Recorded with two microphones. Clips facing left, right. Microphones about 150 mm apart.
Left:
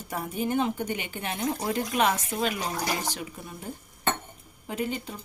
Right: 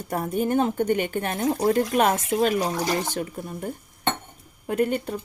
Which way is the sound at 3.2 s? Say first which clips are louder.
Right 8 dB; 45° right (ahead or behind).